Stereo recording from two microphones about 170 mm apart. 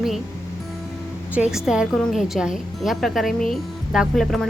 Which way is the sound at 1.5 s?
5° right (ahead or behind).